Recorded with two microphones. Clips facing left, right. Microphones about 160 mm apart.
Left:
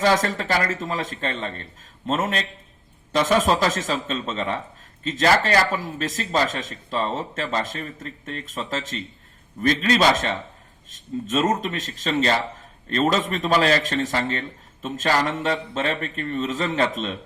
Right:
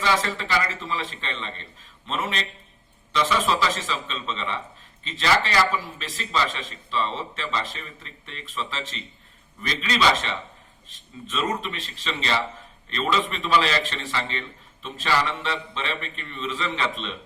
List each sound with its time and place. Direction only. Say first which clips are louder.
0.0 s a man's voice: left 4 dB; 45° left (ahead or behind)